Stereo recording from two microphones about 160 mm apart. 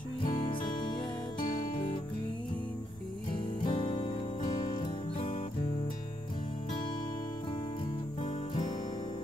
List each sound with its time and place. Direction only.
0.2 s music: 30° left (ahead or behind)
1.4 s music: 60° left (ahead or behind)
3.6 s music: 30° left (ahead or behind)
8.2 s music: 30° left (ahead or behind)